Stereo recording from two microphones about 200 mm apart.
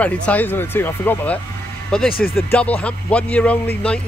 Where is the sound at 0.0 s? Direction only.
5° left (ahead or behind).